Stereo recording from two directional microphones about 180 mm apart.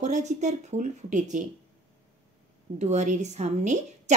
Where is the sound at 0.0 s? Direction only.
40° right (ahead or behind).